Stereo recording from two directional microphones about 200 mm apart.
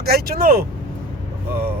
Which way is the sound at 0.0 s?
50° right (ahead or behind).